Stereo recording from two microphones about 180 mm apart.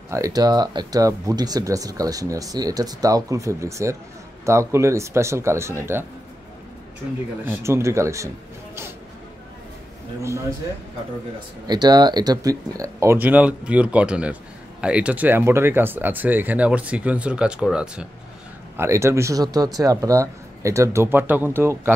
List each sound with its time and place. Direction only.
0.1 s speech: 20° right (ahead or behind)
7.4 s speech: 15° right (ahead or behind)
11.6 s speech: 20° right (ahead or behind); by 18.0 s 5° right (ahead or behind)
18.8 s speech: 15° right (ahead or behind)